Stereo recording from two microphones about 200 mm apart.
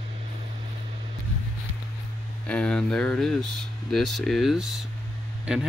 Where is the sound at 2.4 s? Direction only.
5° left (ahead or behind).